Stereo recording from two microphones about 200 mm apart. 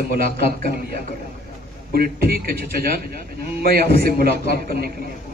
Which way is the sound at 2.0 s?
50° right (ahead or behind).